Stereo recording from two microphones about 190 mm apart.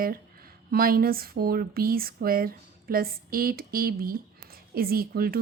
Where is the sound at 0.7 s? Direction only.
50° right (ahead or behind).